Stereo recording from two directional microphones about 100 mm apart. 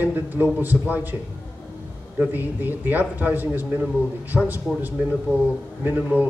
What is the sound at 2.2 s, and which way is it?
A man's voice, 20° right (ahead or behind).